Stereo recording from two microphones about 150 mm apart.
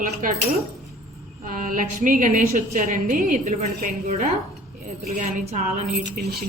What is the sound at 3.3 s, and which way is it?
A woman's voice, 45° right (ahead or behind).